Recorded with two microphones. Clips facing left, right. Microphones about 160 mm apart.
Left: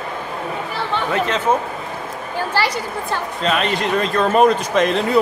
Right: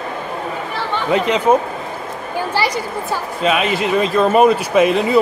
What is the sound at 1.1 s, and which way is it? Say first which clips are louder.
Speech: right 6 dB; 15° right (ahead or behind).